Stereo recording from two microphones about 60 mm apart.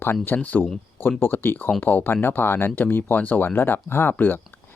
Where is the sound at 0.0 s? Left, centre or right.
Left.